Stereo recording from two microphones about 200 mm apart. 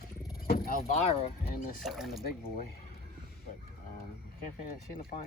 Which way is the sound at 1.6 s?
45° left (ahead or behind).